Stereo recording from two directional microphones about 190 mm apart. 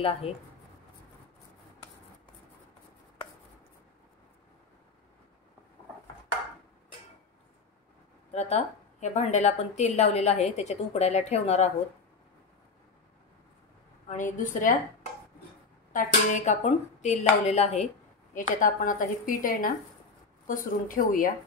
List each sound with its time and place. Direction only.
0.0 s a woman's voice: 30° left (ahead or behind)
8.3 s a woman's voice: 35° left (ahead or behind)
14.0 s a woman's voice: 45° left (ahead or behind)
15.9 s a woman's voice: 45° left (ahead or behind)